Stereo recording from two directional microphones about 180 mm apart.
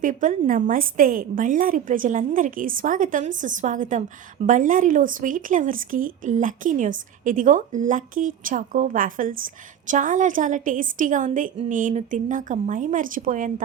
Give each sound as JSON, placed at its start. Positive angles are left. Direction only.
{"t": 0.0, "sound": "speech", "side_deg": -45}